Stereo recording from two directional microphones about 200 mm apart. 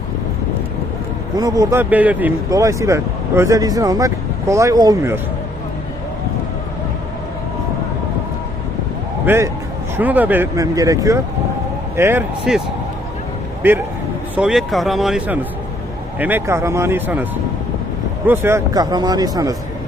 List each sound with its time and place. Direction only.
1.4 s speech: 15° right (ahead or behind)
9.2 s a man's voice: 10° right (ahead or behind)
18.3 s speech: 10° right (ahead or behind)